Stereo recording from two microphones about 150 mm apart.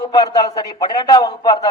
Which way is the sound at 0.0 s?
25° left (ahead or behind).